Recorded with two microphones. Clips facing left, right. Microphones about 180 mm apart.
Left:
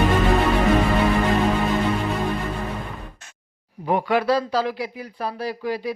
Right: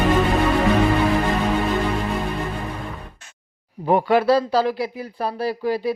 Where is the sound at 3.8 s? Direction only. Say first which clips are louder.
Right 4 dB; 30° right (ahead or behind).